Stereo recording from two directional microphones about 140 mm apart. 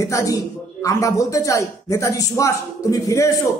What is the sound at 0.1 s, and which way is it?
A man's voice, 25° left (ahead or behind).